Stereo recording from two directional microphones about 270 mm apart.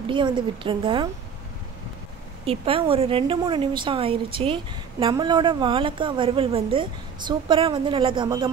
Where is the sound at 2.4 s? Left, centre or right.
Right.